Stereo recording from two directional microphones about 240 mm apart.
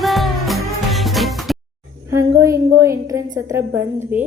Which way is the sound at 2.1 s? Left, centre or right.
Centre.